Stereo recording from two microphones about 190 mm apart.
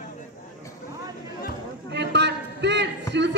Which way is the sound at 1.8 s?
65° right (ahead or behind).